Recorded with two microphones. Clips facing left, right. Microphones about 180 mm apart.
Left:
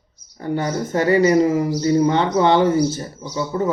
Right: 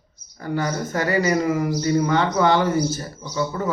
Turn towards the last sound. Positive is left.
turn(degrees=25)  # may be behind; listen again after turning